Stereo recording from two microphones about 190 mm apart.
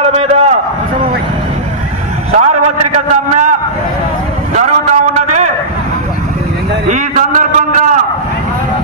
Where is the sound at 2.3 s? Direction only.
35° right (ahead or behind).